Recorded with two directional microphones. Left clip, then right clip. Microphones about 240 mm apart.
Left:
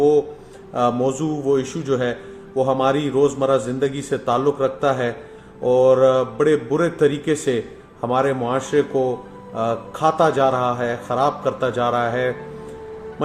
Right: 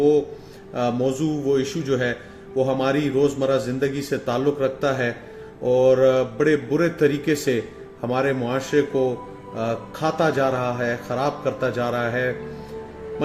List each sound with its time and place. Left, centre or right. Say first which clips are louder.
0.7 s speech: left 3 dB; centre